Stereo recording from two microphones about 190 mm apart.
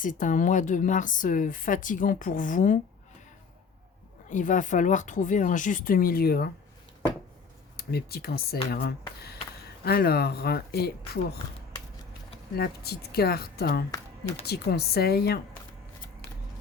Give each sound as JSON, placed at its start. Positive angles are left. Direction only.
{"t": 0.0, "sound": "speech", "side_deg": 45}
{"t": 4.3, "sound": "speech", "side_deg": 40}
{"t": 7.8, "sound": "speech", "side_deg": 55}
{"t": 12.5, "sound": "speech", "side_deg": 55}